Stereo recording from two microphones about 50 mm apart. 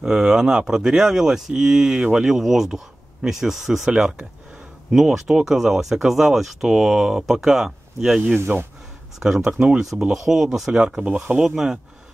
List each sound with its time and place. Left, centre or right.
0.0 s speech: centre
8.5 s speech: right
9.2 s speech: centre